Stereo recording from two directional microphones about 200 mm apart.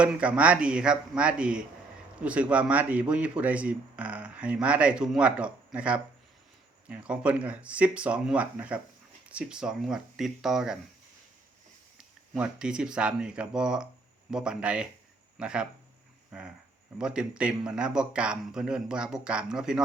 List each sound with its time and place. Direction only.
0.0 s speech: 5° right (ahead or behind)
12.3 s speech: 5° right (ahead or behind)